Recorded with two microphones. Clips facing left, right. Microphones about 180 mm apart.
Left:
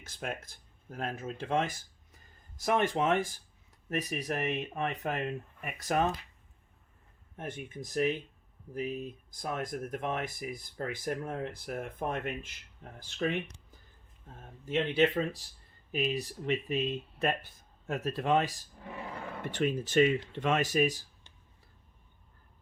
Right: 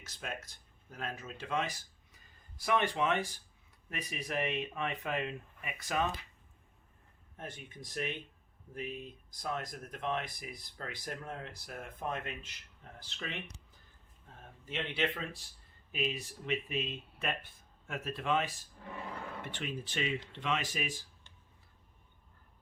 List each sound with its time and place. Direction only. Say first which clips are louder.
0.0 s speech: left 5 dB; 55° left (ahead or behind)
7.3 s speech: left 6 dB; 55° left (ahead or behind)
14.7 s speech: left 8 dB; 45° left (ahead or behind)